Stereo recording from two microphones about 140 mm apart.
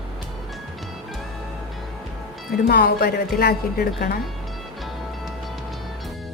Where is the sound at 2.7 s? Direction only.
90° left.